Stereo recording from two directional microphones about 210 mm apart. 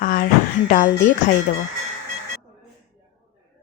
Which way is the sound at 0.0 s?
45° left (ahead or behind).